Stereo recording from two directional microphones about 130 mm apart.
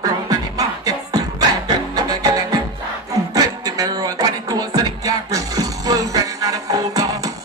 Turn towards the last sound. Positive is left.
turn(degrees=-25)  # may be behind; listen again after turning